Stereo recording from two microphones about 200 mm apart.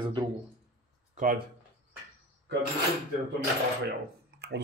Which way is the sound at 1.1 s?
45° right (ahead or behind).